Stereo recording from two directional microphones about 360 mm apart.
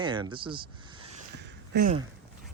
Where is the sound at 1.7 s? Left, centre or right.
Right.